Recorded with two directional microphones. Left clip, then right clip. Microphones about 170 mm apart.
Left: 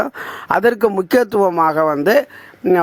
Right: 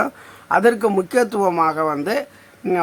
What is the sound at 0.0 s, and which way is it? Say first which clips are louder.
Speech: left 2 dB; 50° left (ahead or behind).